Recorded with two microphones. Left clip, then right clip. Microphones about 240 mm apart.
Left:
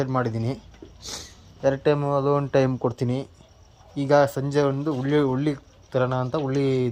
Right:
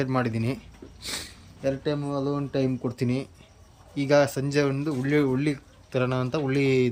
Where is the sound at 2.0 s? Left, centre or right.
Left.